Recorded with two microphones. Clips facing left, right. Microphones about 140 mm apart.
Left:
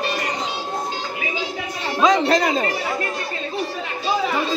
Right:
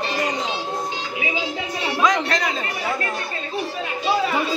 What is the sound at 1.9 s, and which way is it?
Speech, 30° left (ahead or behind).